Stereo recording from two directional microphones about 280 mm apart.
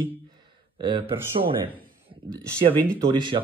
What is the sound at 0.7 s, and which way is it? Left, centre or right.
Speech, centre.